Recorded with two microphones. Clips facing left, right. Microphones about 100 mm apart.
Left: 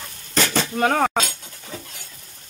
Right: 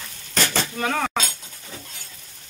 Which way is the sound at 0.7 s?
45° left (ahead or behind).